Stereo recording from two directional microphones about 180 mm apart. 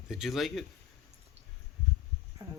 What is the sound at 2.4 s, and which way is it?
Music, 20° right (ahead or behind).